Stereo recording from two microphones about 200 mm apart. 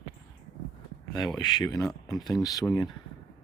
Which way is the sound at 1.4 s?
20° left (ahead or behind).